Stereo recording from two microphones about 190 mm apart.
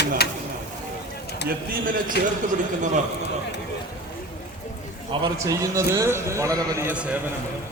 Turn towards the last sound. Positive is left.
turn(degrees=-5)  # may be behind; listen again after turning